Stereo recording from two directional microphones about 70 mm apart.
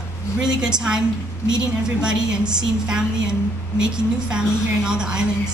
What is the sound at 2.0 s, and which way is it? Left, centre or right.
Speech, centre.